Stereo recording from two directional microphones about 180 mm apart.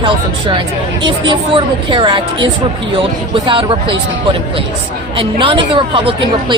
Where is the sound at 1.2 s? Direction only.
25° right (ahead or behind).